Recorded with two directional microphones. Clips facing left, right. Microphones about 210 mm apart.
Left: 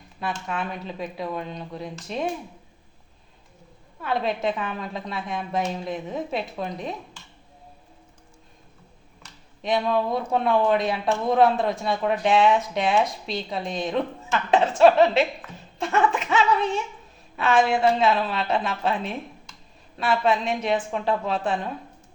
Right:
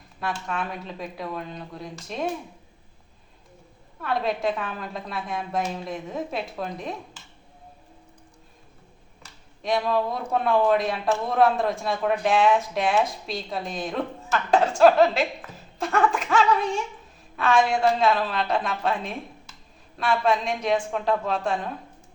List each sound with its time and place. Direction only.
0.2 s speech: centre (ahead or behind)
4.0 s speech: centre (ahead or behind)
9.6 s speech: centre (ahead or behind)